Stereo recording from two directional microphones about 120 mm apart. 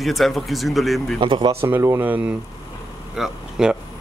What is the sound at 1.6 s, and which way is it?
Speech, 20° right (ahead or behind).